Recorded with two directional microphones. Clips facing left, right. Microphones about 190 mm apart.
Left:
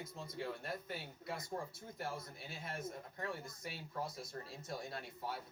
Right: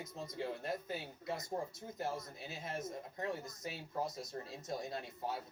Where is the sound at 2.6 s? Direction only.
25° right (ahead or behind).